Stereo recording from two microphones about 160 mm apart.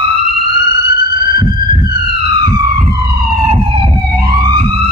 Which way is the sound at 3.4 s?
30° right (ahead or behind).